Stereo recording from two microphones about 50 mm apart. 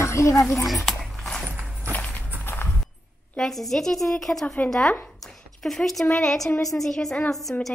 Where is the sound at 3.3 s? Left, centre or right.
Centre.